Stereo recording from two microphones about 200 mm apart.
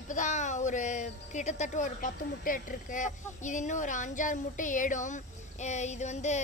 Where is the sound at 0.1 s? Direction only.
35° left (ahead or behind).